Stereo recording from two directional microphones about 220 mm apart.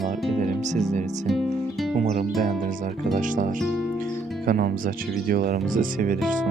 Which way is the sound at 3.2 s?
35° right (ahead or behind).